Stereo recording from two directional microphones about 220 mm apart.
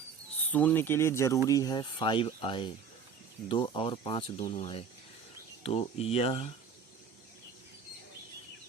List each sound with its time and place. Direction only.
0.5 s speech: 10° left (ahead or behind); by 6.5 s 25° left (ahead or behind)